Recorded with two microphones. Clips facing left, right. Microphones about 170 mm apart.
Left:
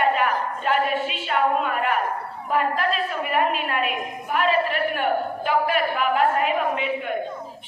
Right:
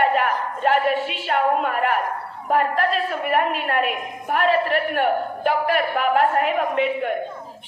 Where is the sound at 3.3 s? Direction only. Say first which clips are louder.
Right 2 dB; 60° right (ahead or behind).